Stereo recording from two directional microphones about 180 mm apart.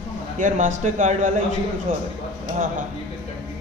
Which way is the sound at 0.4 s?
45° right (ahead or behind).